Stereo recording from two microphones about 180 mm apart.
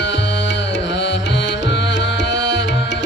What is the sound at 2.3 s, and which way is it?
Music, 80° left.